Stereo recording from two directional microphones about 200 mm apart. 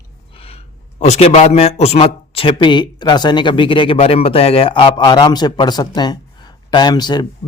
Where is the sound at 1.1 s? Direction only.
30° left (ahead or behind).